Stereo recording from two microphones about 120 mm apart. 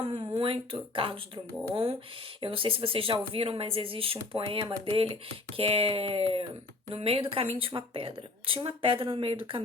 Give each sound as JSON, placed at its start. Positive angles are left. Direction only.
{"t": 0.0, "sound": "a sound", "side_deg": -45}
{"t": 0.3, "sound": "a woman's voice", "side_deg": -45}
{"t": 5.5, "sound": "a woman's voice", "side_deg": -50}